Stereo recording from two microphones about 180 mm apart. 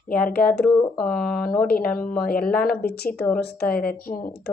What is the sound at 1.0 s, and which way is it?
Speech, 5° left (ahead or behind).